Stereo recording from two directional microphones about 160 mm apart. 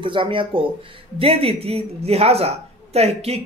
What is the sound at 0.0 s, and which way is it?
A woman's voice, 30° right (ahead or behind).